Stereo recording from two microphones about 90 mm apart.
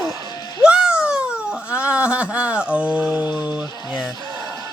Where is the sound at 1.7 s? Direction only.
15° right (ahead or behind).